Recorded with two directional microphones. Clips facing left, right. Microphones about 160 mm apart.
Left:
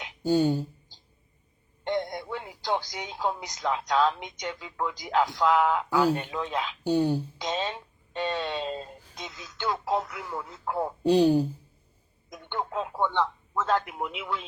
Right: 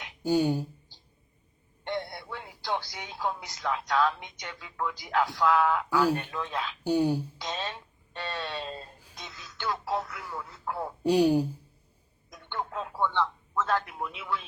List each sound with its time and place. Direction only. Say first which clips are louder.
0.2 s speech: left 2 dB; 10° right (ahead or behind)
1.9 s a sound: left 5 dB; 20° left (ahead or behind)
2.6 s speech: left 3 dB; 20° left (ahead or behind)
6.8 s speech: left 1 dB; 10° right (ahead or behind)
7.3 s speech: left 5 dB; 20° left (ahead or behind)
11.0 s speech: left 2 dB; 10° right (ahead or behind)
12.3 s speech: left 3 dB; 20° left (ahead or behind)